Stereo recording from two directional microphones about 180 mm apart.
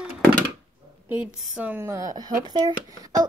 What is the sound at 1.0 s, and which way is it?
A woman's voice, 5° right (ahead or behind).